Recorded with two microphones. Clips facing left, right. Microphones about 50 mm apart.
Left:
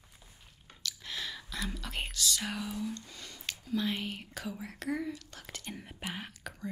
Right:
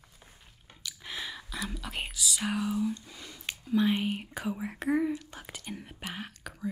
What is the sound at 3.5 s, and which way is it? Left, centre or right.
Speech, centre.